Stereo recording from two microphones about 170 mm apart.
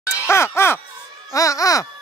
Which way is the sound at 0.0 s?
15° left (ahead or behind).